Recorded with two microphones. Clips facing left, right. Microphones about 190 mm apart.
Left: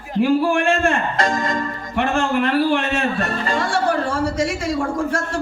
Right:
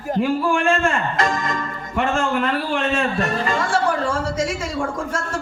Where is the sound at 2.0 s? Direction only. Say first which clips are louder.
Left 1 dB; 60° left (ahead or behind).